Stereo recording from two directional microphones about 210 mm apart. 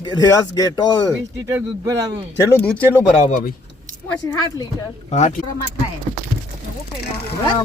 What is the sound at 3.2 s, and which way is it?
Speech, 35° left (ahead or behind).